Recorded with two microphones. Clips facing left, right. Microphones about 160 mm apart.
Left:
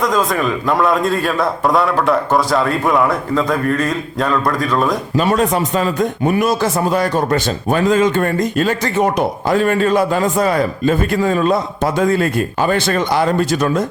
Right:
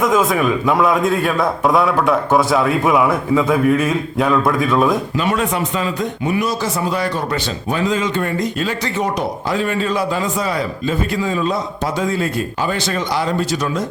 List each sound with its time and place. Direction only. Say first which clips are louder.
0.0 s a man's voice: right 1 dB; 5° right (ahead or behind)
5.1 s speech: left 4 dB; 40° left (ahead or behind)